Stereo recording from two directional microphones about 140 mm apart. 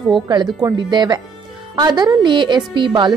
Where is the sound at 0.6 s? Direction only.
30° right (ahead or behind).